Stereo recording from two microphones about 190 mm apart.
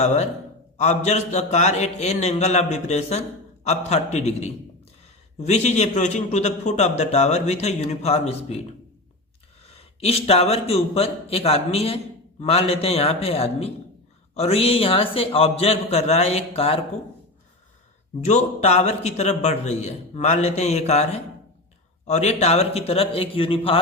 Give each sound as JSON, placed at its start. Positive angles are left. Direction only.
{"t": 0.0, "sound": "a man's voice", "side_deg": 40}
{"t": 10.0, "sound": "a man's voice", "side_deg": 30}
{"t": 18.2, "sound": "a man's voice", "side_deg": 35}